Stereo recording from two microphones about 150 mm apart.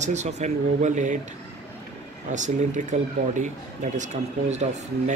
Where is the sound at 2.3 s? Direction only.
55° right (ahead or behind).